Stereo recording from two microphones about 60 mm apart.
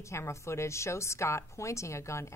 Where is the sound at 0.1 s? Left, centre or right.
Left.